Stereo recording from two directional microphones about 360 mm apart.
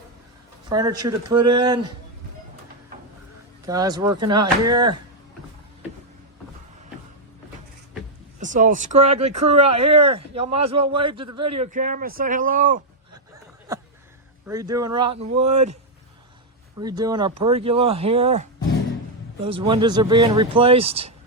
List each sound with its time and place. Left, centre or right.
0.7 s speech: centre
3.7 s speech: centre
8.4 s speech: right
14.4 s speech: centre
16.8 s speech: centre
19.5 s speech: centre